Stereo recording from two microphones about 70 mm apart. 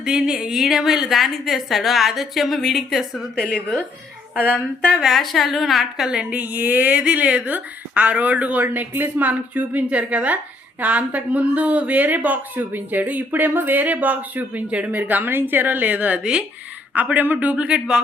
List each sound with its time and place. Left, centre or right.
0.0 s a woman's voice: centre
3.3 s a woman's voice: centre
4.9 s a woman's voice: centre
6.1 s speech: centre